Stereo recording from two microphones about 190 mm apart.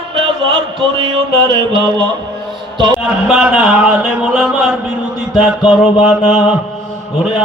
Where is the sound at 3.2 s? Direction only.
5° right (ahead or behind).